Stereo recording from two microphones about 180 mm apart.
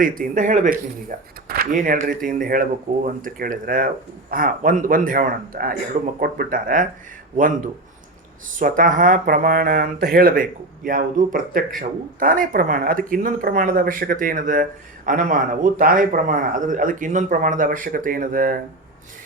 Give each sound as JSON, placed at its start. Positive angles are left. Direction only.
{"t": 0.0, "sound": "speech", "side_deg": -50}
{"t": 8.5, "sound": "speech", "side_deg": -45}